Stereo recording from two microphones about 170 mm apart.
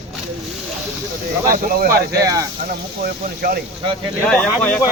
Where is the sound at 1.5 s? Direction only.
60° right (ahead or behind).